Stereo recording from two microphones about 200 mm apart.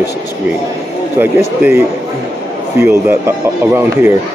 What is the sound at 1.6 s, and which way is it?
Speech, 10° right (ahead or behind).